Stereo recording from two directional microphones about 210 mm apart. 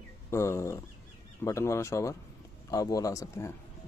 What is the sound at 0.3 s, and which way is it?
Speech, 15° left (ahead or behind).